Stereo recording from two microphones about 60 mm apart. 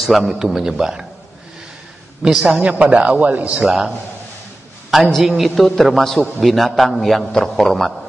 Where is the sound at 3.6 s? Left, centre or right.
Centre.